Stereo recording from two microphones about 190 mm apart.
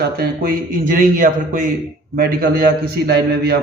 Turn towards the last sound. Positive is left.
turn(degrees=-55)  # may be behind; listen again after turning